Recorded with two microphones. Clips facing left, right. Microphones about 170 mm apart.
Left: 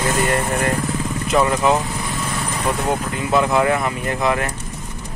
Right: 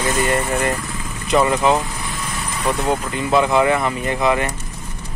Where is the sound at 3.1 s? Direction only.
Centre (ahead or behind).